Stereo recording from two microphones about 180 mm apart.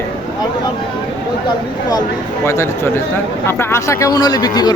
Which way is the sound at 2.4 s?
15° left (ahead or behind).